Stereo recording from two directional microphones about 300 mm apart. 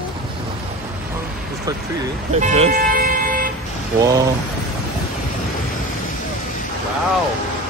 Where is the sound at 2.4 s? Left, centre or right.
Right.